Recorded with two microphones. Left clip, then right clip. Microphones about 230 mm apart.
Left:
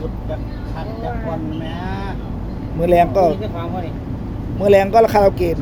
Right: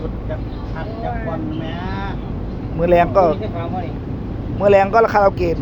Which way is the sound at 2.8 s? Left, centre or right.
Centre.